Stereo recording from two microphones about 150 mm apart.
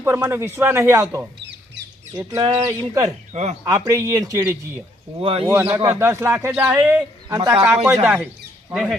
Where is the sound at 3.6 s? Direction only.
25° right (ahead or behind).